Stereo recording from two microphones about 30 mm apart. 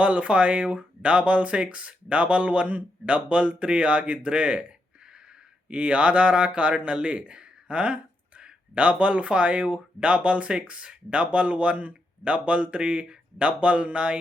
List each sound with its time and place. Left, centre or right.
0.0 s speech: right
5.6 s speech: right